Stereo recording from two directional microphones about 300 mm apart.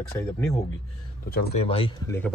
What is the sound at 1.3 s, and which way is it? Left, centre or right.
Speech, left.